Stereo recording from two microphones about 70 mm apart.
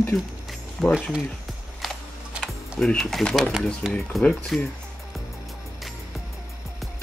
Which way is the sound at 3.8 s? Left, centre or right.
Centre.